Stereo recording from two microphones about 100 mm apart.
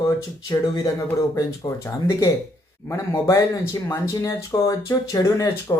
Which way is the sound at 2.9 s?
35° left (ahead or behind).